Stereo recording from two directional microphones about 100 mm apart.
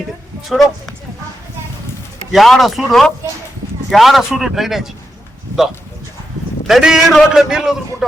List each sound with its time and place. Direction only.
0.4 s speech: centre (ahead or behind)
2.3 s a man's voice: centre (ahead or behind)
6.7 s a man's voice: 5° right (ahead or behind)